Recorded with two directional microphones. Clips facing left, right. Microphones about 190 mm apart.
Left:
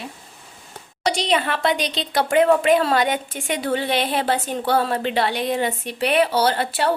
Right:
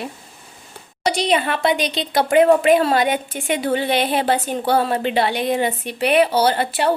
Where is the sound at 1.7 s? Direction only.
50° right (ahead or behind).